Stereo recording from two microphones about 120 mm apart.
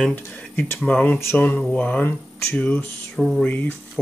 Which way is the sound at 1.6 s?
10° left (ahead or behind).